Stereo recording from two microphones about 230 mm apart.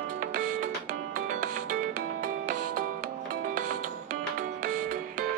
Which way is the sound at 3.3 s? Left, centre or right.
Right.